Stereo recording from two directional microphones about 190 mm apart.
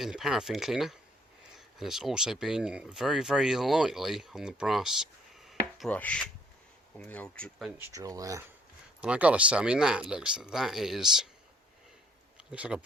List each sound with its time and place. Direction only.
0.0 s speech: centre (ahead or behind)
5.5 s wood: centre (ahead or behind)
7.0 s speech: 5° left (ahead or behind)
7.8 s speech: 15° right (ahead or behind)
9.0 s speech: 5° right (ahead or behind)
12.5 s speech: 5° right (ahead or behind)